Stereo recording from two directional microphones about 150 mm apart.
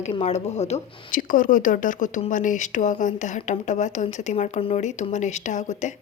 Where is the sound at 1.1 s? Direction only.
65° left (ahead or behind).